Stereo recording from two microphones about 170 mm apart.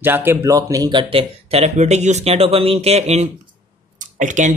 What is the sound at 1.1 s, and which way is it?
Speech, 35° right (ahead or behind).